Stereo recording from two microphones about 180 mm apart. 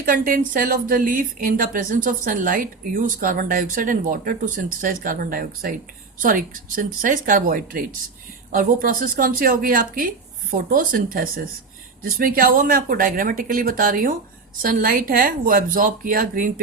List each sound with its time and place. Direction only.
0.0 s speech: 50° right (ahead or behind)